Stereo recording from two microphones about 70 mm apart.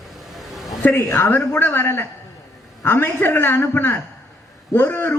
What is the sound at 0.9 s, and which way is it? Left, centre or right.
A man's voice, left.